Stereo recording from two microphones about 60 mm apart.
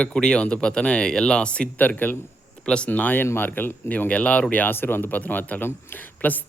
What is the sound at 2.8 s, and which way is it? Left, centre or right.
Speech, left.